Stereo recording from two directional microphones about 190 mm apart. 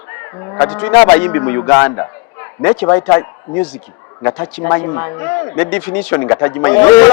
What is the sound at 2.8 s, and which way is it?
Cattle, 15° left (ahead or behind).